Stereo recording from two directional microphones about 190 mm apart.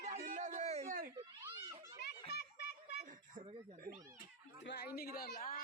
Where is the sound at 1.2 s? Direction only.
20° right (ahead or behind).